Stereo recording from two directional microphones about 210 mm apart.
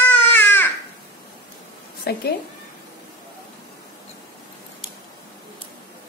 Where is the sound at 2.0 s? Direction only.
45° left (ahead or behind).